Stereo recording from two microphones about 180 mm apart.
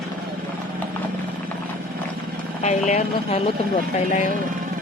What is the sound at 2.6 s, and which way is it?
Speech, 40° left (ahead or behind).